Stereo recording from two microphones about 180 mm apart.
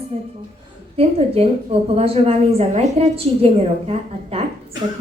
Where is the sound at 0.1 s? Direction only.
35° right (ahead or behind).